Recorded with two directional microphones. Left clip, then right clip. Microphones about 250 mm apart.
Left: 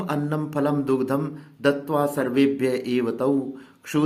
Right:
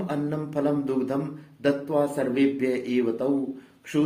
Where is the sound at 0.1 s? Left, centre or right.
Left.